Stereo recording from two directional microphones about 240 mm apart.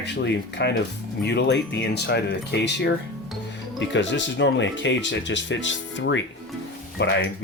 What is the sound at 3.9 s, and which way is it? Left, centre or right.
Speech, left.